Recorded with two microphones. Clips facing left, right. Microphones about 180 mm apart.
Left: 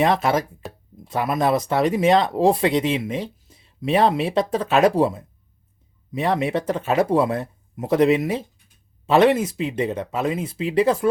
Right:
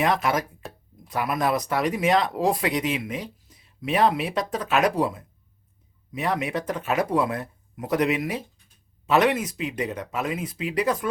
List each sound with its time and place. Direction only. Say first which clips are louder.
0.0 s speech: left 4 dB; 30° left (ahead or behind)
0.6 s a sound: left 4 dB; centre (ahead or behind)
1.0 s speech: left 4 dB; 25° left (ahead or behind)